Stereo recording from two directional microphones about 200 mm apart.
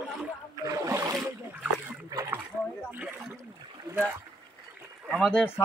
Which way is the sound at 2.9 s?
5° right (ahead or behind).